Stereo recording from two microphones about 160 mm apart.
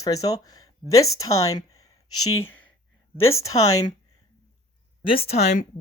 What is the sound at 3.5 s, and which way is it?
Speech, 20° left (ahead or behind).